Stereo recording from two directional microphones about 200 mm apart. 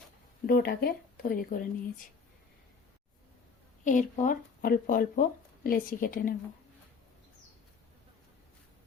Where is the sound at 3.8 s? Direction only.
40° left (ahead or behind).